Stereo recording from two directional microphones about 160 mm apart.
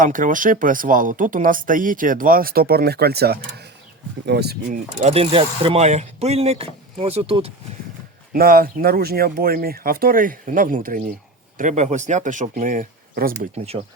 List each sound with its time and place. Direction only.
0.0 s speech: 55° right (ahead or behind); by 4.8 s 90° right
4.9 s speech: 40° right (ahead or behind)
8.3 s speech: 65° right (ahead or behind)